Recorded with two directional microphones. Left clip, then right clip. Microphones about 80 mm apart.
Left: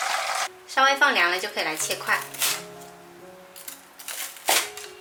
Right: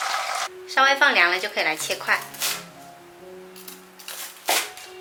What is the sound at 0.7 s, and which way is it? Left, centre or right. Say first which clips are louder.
Speech: right 2 dB; centre.